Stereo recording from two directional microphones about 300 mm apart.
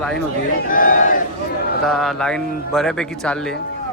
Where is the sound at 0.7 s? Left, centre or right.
Left.